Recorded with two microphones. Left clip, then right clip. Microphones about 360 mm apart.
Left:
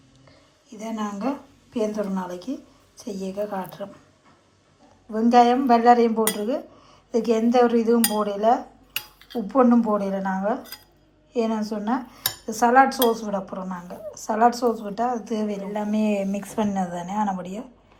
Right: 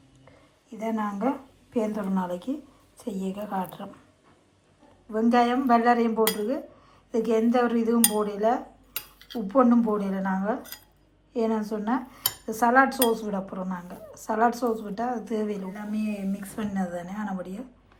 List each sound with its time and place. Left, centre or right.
0.8 s dishes: centre
5.1 s dishes: centre